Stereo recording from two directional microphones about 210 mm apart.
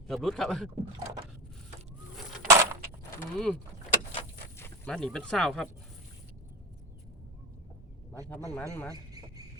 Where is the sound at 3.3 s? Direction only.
Centre (ahead or behind).